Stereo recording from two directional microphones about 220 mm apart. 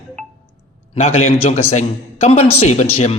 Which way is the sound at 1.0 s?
30° left (ahead or behind).